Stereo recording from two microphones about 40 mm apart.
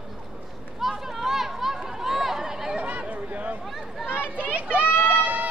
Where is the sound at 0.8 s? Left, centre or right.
Centre.